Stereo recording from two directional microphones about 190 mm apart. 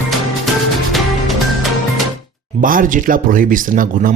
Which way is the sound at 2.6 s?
45° right (ahead or behind).